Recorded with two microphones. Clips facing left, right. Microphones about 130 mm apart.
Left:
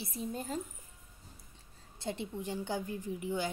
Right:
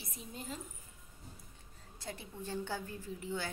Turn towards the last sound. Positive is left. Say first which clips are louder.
# left 5 dB
turn(degrees=15)  # may be behind; listen again after turning